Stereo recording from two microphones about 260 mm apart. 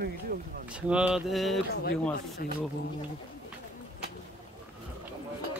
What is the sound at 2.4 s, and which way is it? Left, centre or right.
Speech, left.